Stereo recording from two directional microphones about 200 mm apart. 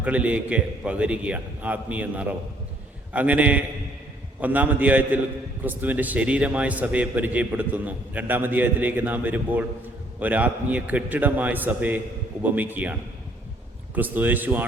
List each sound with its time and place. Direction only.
0.0 s a man's voice: 5° right (ahead or behind)